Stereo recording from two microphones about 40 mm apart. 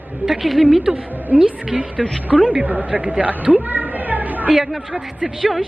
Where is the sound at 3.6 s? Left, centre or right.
Right.